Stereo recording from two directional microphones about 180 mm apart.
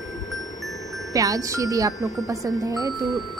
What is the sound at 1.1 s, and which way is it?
Speech, 20° right (ahead or behind).